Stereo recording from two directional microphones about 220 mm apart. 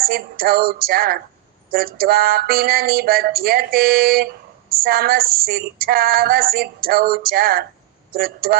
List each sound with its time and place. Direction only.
0.0 s female singing: 45° right (ahead or behind)